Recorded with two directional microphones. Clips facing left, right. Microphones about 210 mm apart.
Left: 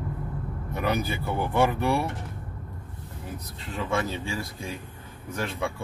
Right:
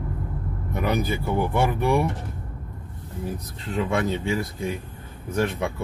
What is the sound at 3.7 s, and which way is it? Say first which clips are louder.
Speech: right 4 dB; 20° right (ahead or behind).